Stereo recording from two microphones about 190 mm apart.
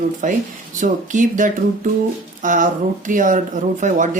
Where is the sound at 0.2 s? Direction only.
45° right (ahead or behind).